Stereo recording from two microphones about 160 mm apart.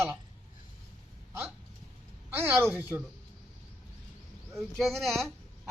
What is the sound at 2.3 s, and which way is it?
Speech, 15° right (ahead or behind).